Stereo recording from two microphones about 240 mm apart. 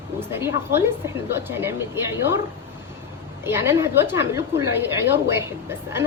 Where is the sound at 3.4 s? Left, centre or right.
Centre.